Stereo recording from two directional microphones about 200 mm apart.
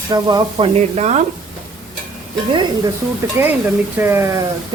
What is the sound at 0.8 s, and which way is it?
Speech, 35° right (ahead or behind).